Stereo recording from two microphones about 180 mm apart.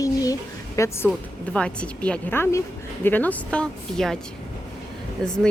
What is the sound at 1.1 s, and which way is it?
Speech, 5° left (ahead or behind).